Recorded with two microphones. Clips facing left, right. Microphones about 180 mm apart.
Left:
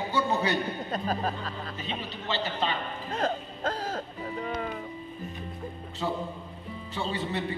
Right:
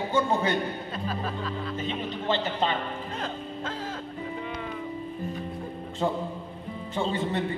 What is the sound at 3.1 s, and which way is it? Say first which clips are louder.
Music: left 3 dB; 40° left (ahead or behind).